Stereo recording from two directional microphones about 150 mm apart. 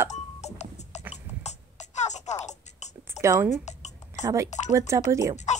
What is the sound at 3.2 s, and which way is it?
Speech, 20° right (ahead or behind).